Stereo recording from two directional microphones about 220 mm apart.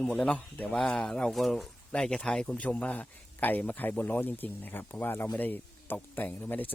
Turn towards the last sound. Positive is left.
turn(degrees=10)  # may be behind; listen again after turning